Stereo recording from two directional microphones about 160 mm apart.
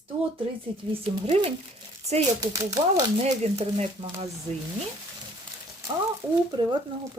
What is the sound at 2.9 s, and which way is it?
Speech, 45° right (ahead or behind).